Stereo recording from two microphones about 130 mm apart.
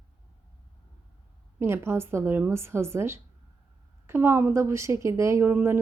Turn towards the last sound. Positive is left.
turn(degrees=-15)  # may be behind; listen again after turning